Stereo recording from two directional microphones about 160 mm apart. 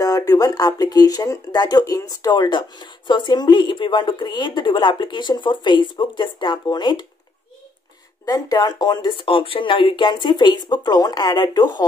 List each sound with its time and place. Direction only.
0.0 s speech: 20° left (ahead or behind)
8.3 s speech: 25° left (ahead or behind)